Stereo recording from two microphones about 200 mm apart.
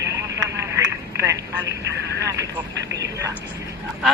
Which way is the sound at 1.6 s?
60° right (ahead or behind).